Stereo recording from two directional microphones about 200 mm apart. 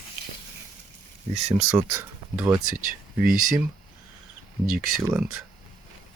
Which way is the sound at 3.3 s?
40° right (ahead or behind).